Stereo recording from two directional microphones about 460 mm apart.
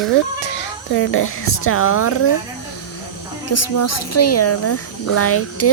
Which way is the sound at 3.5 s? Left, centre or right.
Left.